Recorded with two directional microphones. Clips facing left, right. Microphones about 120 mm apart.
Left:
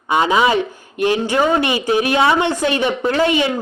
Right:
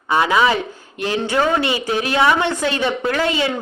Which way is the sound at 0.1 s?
15° left (ahead or behind).